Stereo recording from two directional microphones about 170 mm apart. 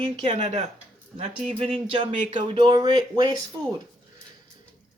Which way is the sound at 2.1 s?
45° right (ahead or behind).